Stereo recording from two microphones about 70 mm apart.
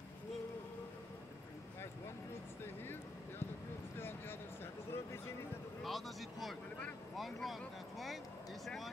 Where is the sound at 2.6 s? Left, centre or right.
Left.